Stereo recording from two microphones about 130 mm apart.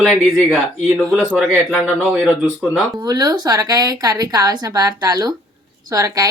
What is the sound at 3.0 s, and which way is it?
A woman's voice, 30° right (ahead or behind).